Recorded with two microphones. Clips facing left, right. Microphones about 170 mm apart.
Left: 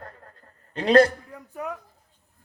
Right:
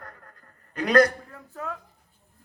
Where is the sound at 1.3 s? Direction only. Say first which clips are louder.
Left 3 dB; 15° left (ahead or behind).